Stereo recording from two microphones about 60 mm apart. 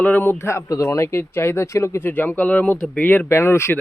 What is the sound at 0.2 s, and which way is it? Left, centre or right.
Speech, left.